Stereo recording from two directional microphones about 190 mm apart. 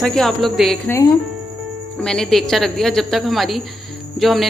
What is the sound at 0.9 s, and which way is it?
Speech, 15° left (ahead or behind).